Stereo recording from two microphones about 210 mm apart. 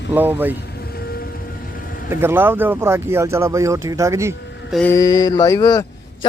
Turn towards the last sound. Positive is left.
turn(degrees=15)  # may be behind; listen again after turning